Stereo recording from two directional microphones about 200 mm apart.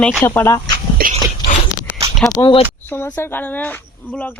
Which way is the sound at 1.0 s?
50° right (ahead or behind).